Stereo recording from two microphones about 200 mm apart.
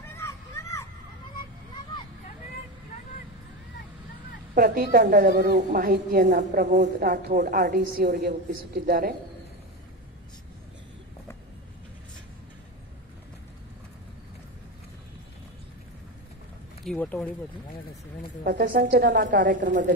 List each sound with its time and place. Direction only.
0.1 s a sound: 15° left (ahead or behind)
4.6 s a woman's voice: 45° right (ahead or behind)
16.8 s speech: 5° left (ahead or behind)
18.4 s a woman's voice: 45° right (ahead or behind)